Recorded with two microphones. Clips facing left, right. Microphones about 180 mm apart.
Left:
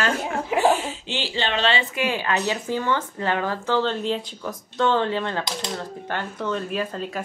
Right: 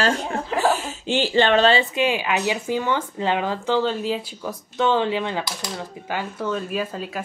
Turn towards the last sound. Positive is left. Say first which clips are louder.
# even
turn(degrees=-5)  # may be behind; listen again after turning